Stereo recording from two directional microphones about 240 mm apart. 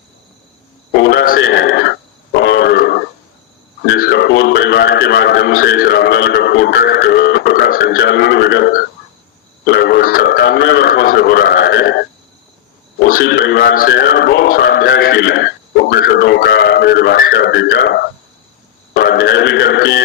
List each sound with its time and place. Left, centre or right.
0.9 s speech: left
2.4 s grunt: left
3.9 s speech: left
13.1 s speech: left